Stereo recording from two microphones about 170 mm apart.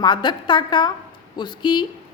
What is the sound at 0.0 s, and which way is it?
A woman's voice, 25° left (ahead or behind).